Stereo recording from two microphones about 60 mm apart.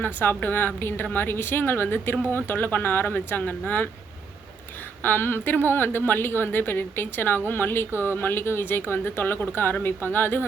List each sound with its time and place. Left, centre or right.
0.0 s a woman's voice: left
5.0 s a woman's voice: left